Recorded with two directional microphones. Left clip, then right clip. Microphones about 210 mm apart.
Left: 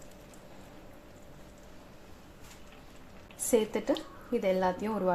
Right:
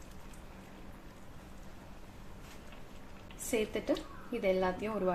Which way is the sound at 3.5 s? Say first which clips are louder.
Left 5 dB; 30° left (ahead or behind).